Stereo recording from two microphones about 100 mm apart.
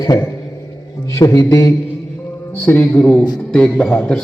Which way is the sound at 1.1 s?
30° left (ahead or behind).